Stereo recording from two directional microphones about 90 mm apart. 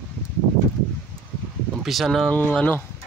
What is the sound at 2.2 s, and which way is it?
Speech, 20° left (ahead or behind).